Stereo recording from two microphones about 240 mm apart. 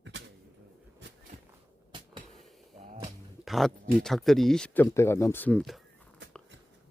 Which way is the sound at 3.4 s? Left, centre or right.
Centre.